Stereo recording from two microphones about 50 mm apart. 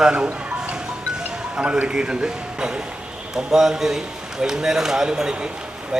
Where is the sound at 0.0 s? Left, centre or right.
Centre.